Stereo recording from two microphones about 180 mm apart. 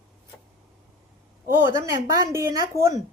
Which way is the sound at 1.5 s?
20° right (ahead or behind).